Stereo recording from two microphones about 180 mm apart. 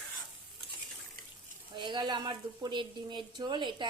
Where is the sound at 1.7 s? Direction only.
25° right (ahead or behind).